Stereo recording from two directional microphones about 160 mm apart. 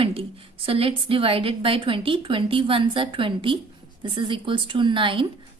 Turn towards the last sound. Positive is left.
turn(degrees=-30)  # may be behind; listen again after turning